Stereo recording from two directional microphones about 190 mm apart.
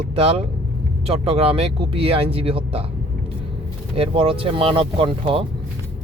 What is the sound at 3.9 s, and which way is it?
Speech, 30° right (ahead or behind).